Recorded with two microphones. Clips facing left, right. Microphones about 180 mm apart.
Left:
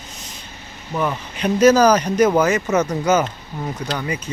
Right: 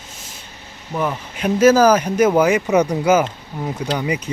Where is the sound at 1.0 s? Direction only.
5° right (ahead or behind).